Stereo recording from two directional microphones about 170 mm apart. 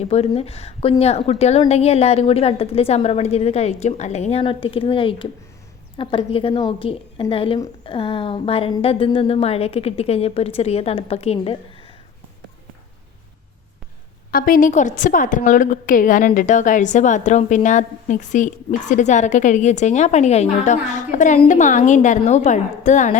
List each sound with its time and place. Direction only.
0.0 s a woman's voice: 35° left (ahead or behind)
14.3 s a woman's voice: 55° left (ahead or behind)